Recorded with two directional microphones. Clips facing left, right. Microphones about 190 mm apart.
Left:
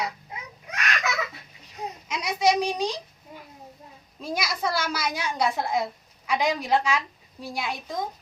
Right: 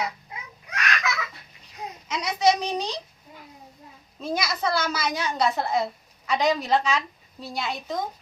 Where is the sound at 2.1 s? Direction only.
10° left (ahead or behind).